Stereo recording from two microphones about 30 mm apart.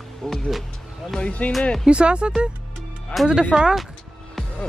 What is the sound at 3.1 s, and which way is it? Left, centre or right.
Speech, left.